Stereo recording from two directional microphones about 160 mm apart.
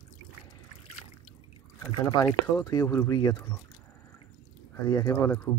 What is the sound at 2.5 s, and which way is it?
Speech, 20° left (ahead or behind).